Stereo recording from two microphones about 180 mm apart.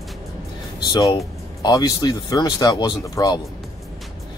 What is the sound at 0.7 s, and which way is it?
Speech, 25° left (ahead or behind).